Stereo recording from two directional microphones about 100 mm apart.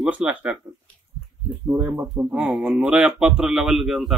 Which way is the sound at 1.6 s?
35° right (ahead or behind).